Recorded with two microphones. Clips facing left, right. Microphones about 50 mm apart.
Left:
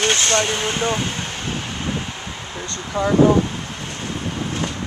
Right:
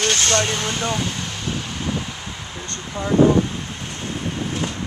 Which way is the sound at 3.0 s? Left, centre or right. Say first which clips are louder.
Left 7 dB; left.